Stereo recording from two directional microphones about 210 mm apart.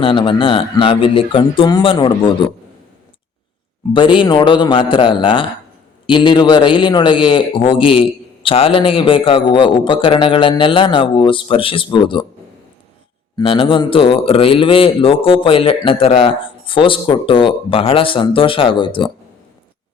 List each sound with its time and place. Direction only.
0.0 s a man's voice: 25° left (ahead or behind)
3.9 s a man's voice: 25° left (ahead or behind)
13.3 s a man's voice: 25° left (ahead or behind)